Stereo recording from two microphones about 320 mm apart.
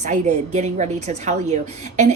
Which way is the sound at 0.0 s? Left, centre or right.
Right.